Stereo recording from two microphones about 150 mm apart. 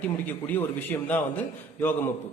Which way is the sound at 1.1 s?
10° left (ahead or behind).